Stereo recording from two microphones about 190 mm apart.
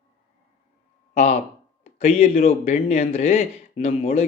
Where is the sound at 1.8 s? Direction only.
35° left (ahead or behind).